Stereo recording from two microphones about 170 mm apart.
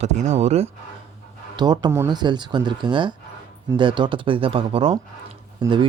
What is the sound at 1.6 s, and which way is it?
Speech, 25° right (ahead or behind).